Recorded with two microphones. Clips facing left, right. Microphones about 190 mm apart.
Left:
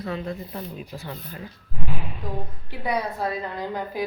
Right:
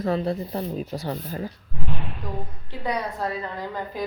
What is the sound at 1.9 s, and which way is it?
A woman's voice, 5° left (ahead or behind).